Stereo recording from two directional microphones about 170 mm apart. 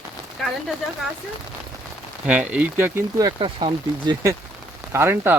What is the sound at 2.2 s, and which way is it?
Speech, 10° right (ahead or behind).